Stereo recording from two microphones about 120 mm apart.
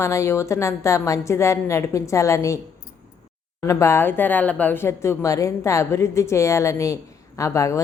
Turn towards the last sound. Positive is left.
turn(degrees=25)  # may be behind; listen again after turning